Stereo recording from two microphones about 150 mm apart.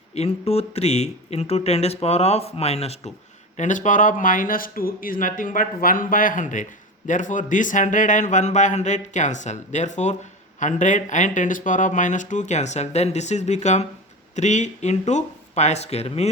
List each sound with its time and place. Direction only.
0.1 s speech: 45° left (ahead or behind)
3.6 s speech: 55° left (ahead or behind)